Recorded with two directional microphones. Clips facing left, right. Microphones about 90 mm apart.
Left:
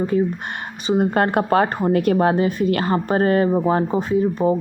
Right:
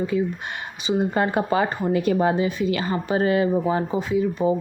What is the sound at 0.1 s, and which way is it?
Speech, 45° left (ahead or behind).